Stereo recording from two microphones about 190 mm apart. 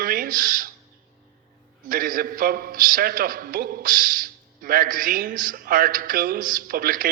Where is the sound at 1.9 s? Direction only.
45° right (ahead or behind).